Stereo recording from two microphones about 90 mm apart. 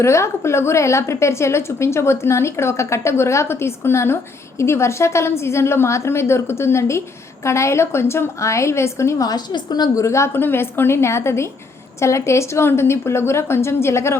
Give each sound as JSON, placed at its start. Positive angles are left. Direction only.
{"t": 0.0, "sound": "a woman's voice", "side_deg": 30}